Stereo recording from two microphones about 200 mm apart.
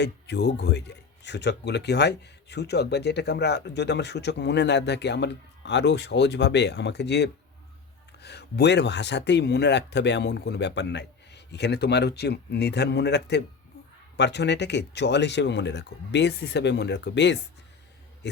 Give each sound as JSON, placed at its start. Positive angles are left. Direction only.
{"t": 0.0, "sound": "speech", "side_deg": 60}